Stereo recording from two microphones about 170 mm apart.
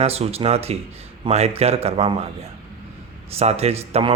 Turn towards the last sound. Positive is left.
turn(degrees=-35)  # may be behind; listen again after turning